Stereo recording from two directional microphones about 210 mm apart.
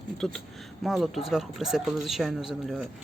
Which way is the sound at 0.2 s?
Centre (ahead or behind).